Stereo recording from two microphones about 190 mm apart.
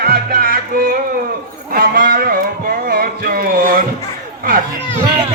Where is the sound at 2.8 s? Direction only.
50° right (ahead or behind).